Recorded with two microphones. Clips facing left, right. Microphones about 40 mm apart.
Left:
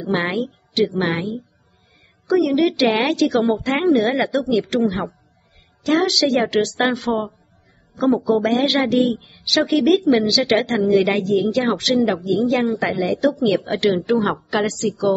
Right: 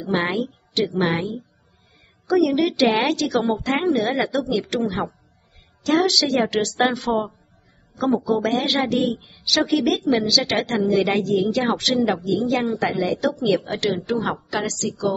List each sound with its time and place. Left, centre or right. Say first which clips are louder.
0.0 s a woman's voice: left 1 dB; centre
13.9 s a woman's voice: left 5 dB; left